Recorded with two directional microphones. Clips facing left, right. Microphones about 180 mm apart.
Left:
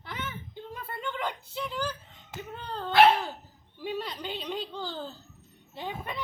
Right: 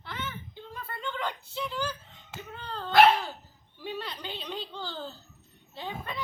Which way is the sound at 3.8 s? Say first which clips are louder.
Left 3 dB; 10° left (ahead or behind).